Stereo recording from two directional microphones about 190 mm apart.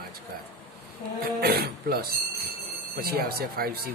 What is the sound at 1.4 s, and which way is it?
Speech, 55° right (ahead or behind).